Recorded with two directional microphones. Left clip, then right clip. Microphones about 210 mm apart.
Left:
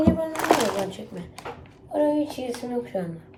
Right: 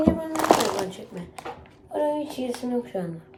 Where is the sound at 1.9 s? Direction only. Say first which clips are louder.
Left 2 dB; 10° right (ahead or behind).